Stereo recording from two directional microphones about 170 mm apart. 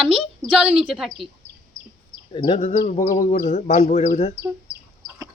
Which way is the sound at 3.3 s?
40° left (ahead or behind).